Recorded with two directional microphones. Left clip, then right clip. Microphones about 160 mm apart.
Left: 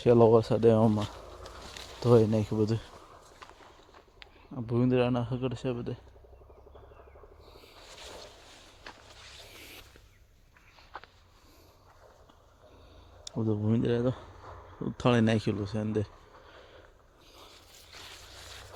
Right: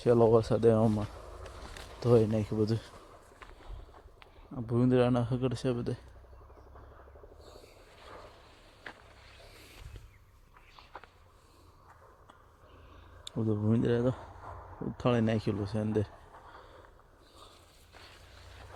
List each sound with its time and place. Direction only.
0.0 s speech: 20° left (ahead or behind)
2.6 s speech: 5° left (ahead or behind)
4.2 s a sound: 10° left (ahead or behind)
4.9 s a man's voice: 5° right (ahead or behind)
13.4 s speech: 5° left (ahead or behind)
14.9 s speech: 25° left (ahead or behind)
15.6 s speech: 5° left (ahead or behind)